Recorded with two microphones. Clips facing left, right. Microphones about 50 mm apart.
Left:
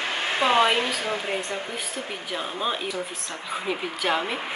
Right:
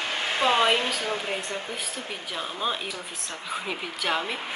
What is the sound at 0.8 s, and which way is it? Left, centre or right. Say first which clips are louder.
Speech: left 2 dB; left.